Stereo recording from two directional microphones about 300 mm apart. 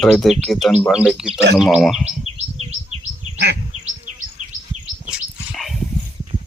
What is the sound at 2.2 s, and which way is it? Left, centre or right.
Bird, centre.